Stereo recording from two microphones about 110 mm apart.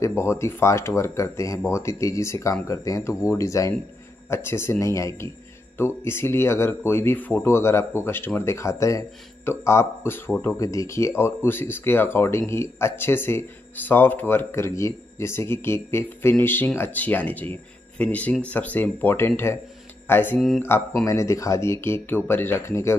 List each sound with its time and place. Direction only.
0.0 s speech: 25° left (ahead or behind)
20.3 s speech: centre (ahead or behind)
21.0 s speech: 30° left (ahead or behind)